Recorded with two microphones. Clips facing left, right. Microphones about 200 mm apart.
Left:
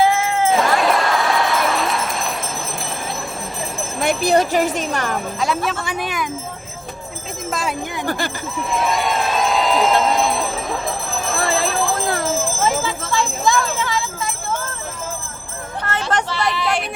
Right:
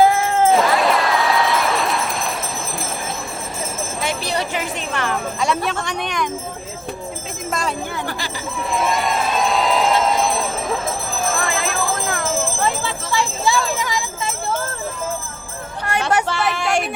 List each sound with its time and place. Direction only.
0.0 s cat: 45° right (ahead or behind)
0.5 s a sound: centre (ahead or behind)
4.0 s jingle bell: 50° left (ahead or behind)
5.4 s speech: centre (ahead or behind)
8.7 s run: centre (ahead or behind)
11.6 s jingle bell: 35° left (ahead or behind)
13.1 s a sound: 10° right (ahead or behind)
15.8 s a sound: 10° right (ahead or behind)
16.2 s speech: 50° right (ahead or behind)